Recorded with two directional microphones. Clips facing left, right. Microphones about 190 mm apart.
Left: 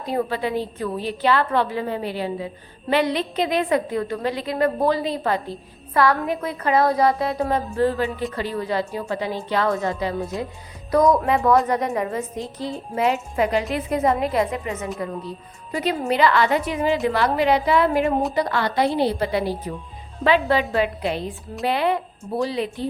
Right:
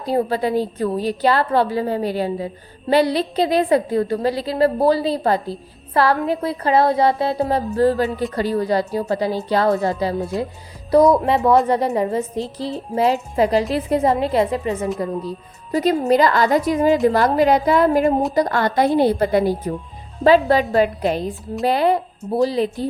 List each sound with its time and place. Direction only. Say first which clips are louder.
0.0 s a woman's voice: right 4 dB; 35° right (ahead or behind)
11.2 s a woman's voice: right 3 dB; 25° right (ahead or behind)